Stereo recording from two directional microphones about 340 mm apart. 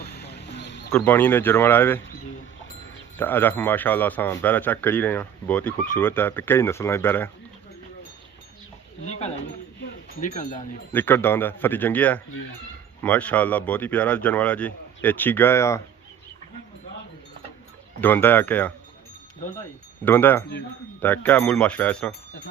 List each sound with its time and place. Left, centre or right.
0.0 s wild animals: left
0.9 s speech: centre
3.2 s a man's voice: centre
9.8 s wind chime: left
10.9 s a man's voice: centre
18.0 s a man's voice: centre
20.1 s a man's voice: centre